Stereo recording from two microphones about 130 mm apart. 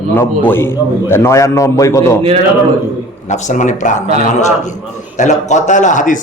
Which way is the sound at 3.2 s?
65° left (ahead or behind).